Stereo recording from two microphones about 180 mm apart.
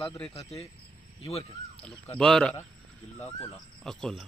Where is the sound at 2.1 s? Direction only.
5° left (ahead or behind).